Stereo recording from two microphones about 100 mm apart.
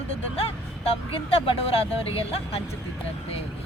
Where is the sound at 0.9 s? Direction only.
75° left (ahead or behind).